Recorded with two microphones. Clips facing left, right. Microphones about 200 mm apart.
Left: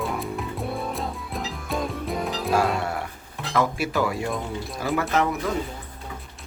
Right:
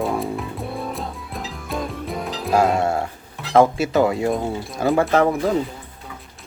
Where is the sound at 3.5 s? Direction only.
25° right (ahead or behind).